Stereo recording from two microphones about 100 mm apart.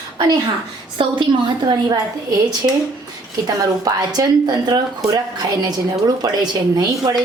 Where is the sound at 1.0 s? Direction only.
55° right (ahead or behind).